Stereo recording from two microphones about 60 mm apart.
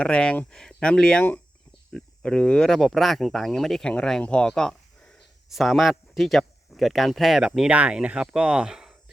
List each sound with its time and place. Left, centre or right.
0.0 s speech: centre
2.2 s speech: centre
5.5 s speech: centre
7.7 s speech: right